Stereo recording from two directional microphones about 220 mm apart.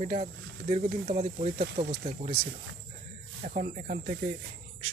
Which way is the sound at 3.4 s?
30° right (ahead or behind).